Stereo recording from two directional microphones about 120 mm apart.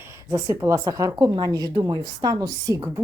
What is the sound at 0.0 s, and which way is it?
A woman's voice, 25° right (ahead or behind).